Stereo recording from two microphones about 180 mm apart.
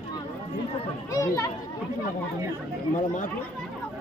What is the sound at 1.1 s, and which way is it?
Speech, 20° left (ahead or behind).